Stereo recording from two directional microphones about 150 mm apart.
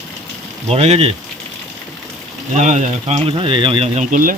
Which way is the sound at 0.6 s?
45° right (ahead or behind).